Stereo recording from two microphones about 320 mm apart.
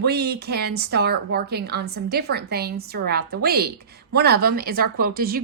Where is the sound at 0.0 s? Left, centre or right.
Right.